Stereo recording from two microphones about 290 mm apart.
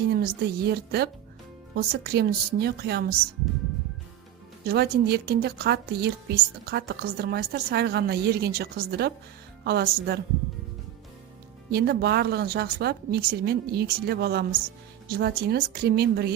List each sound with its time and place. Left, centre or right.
0.0 s speech: right
4.6 s speech: right
11.7 s speech: right